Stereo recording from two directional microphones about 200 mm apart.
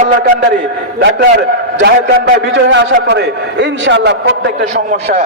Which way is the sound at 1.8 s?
60° right (ahead or behind).